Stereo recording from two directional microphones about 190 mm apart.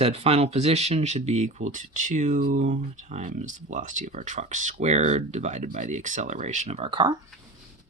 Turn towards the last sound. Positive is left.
turn(degrees=-25)  # may be behind; listen again after turning